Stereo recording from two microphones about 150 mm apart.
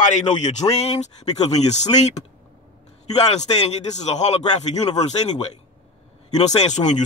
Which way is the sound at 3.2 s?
50° left (ahead or behind).